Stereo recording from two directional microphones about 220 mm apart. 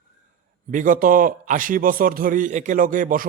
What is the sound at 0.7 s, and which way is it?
A man's voice, 35° right (ahead or behind).